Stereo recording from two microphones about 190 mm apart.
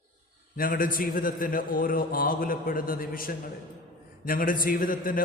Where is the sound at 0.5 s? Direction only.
50° left (ahead or behind).